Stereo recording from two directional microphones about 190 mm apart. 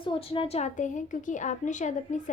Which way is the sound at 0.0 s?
30° left (ahead or behind).